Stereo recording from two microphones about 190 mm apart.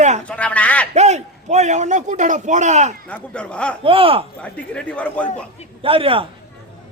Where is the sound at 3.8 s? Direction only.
30° right (ahead or behind).